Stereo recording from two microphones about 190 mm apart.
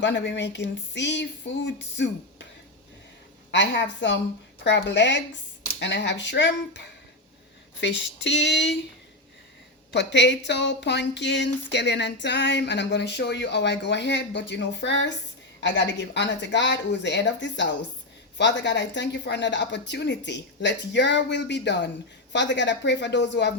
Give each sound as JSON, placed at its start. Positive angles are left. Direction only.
{"t": 0.0, "sound": "speech", "side_deg": 70}
{"t": 3.5, "sound": "speech", "side_deg": 70}
{"t": 9.9, "sound": "speech", "side_deg": 65}